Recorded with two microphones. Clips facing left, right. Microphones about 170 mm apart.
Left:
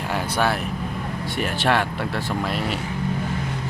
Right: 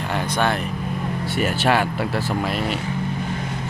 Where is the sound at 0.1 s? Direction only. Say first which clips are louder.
Right 1 dB; 10° left (ahead or behind).